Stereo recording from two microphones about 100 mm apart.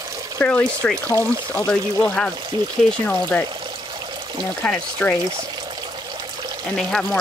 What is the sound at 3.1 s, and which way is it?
Speech, 15° left (ahead or behind).